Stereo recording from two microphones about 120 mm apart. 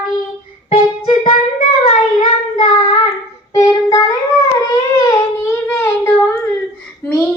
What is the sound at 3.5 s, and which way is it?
Child singing, 30° left (ahead or behind).